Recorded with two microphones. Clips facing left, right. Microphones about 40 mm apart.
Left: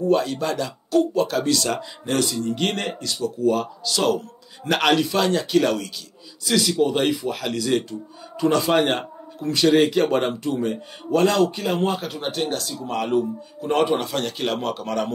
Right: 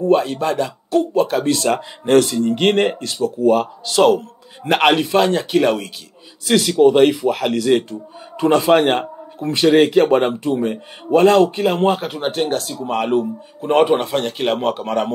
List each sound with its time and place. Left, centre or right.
0.0 s speech: right
2.0 s a man's voice: right
6.4 s a man's voice: right